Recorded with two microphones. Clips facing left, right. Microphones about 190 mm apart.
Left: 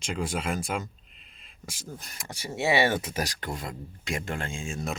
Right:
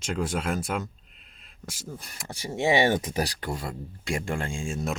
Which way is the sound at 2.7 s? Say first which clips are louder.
Right 2 dB; 15° right (ahead or behind).